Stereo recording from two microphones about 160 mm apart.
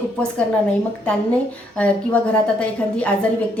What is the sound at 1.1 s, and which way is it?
A woman's voice, 5° left (ahead or behind).